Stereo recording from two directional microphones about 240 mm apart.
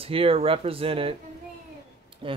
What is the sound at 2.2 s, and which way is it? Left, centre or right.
Speech, right.